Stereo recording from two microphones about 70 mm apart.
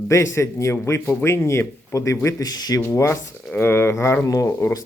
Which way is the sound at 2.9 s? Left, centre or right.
Left.